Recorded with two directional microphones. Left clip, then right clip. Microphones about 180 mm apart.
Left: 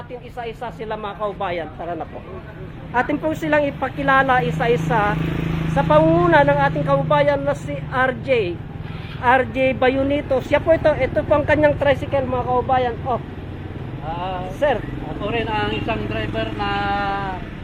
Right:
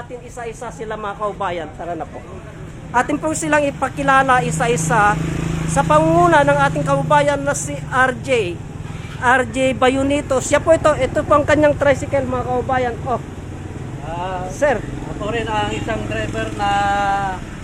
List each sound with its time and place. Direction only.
0.4 s speech: 15° right (ahead or behind)
2.9 s speech: 15° right (ahead or behind); by 13.1 s 30° right (ahead or behind)
14.2 s speech: 30° right (ahead or behind)